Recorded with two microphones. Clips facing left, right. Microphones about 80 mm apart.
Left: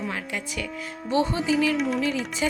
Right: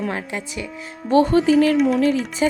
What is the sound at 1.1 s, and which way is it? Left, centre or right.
Speech, right.